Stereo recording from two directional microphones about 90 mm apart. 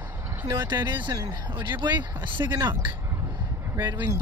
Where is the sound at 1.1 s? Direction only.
55° right (ahead or behind).